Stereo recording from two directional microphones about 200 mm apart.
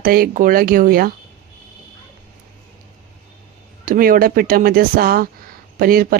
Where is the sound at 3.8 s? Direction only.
45° right (ahead or behind).